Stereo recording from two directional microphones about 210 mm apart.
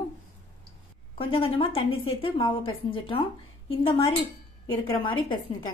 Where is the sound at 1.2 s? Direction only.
25° left (ahead or behind).